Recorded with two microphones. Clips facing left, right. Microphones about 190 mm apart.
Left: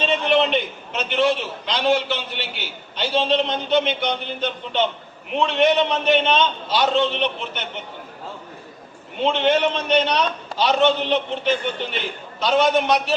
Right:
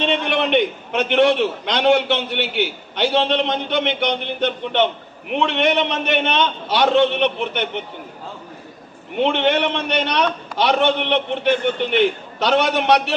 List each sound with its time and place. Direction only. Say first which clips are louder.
0.0 s a man's voice: left 1 dB; 65° right (ahead or behind)
9.1 s a man's voice: right 1 dB; 65° right (ahead or behind)